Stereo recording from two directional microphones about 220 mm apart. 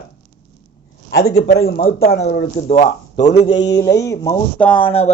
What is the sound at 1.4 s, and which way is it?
Speech, 45° left (ahead or behind).